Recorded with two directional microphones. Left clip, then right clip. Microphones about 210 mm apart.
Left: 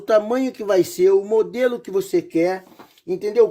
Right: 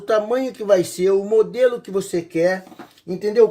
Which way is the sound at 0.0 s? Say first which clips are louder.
Left 1 dB; 40° left (ahead or behind).